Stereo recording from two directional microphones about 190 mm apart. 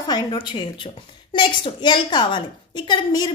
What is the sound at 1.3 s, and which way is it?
A woman's voice, 25° left (ahead or behind).